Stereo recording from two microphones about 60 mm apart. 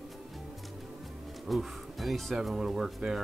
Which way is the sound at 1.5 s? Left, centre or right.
Centre.